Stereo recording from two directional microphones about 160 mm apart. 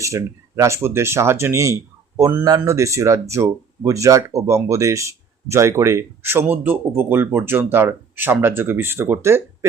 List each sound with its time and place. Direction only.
0.0 s speech: 20° right (ahead or behind)